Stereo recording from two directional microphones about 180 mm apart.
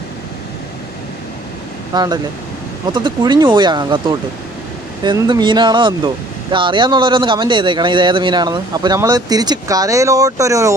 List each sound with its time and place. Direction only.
1.9 s speech: 25° right (ahead or behind)